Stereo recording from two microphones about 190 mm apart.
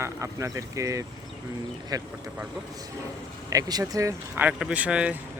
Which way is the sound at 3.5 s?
20° right (ahead or behind).